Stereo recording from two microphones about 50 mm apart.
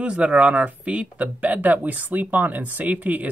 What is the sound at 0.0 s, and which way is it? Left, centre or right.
Speech, right.